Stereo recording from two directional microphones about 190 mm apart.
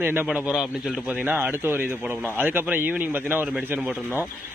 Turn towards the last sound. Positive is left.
turn(degrees=-5)  # may be behind; listen again after turning